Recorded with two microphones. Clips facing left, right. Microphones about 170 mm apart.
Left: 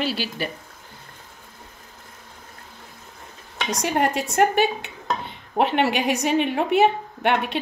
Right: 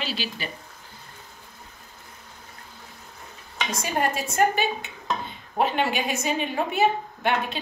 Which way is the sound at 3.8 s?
75° left (ahead or behind).